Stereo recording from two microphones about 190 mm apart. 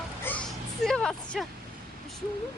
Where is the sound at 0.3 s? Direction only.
10° left (ahead or behind).